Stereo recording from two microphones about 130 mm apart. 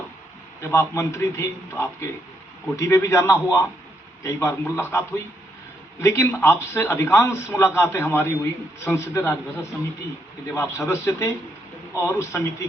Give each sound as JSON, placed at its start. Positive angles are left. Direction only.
{"t": 0.6, "sound": "a man's voice", "side_deg": 20}